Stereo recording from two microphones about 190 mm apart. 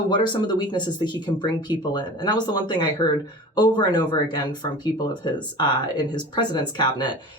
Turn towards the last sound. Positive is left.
turn(degrees=25)  # may be behind; listen again after turning